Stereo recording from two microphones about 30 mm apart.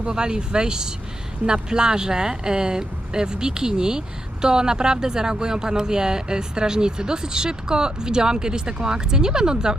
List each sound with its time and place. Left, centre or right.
0.1 s speech: right